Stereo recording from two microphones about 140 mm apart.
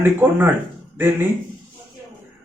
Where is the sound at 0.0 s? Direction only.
15° right (ahead or behind).